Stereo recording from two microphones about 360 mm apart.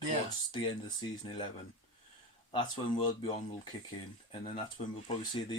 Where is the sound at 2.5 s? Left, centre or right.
Centre.